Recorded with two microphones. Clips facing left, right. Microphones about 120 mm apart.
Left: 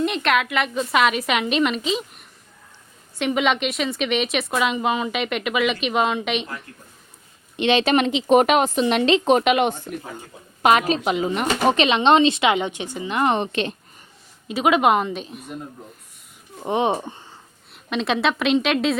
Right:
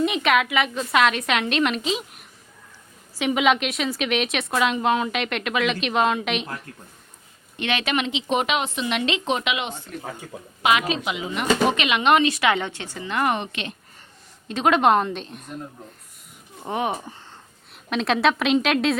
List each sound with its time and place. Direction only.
0.0 s a woman's voice: centre (ahead or behind)
7.5 s speech: 25° left (ahead or behind)
7.9 s speech: 45° left (ahead or behind)
14.4 s a woman's voice: 5° left (ahead or behind)
16.6 s speech: 25° left (ahead or behind)
17.8 s a woman's voice: centre (ahead or behind)